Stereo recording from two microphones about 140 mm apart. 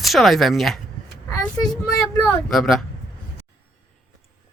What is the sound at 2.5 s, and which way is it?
Speech, centre (ahead or behind).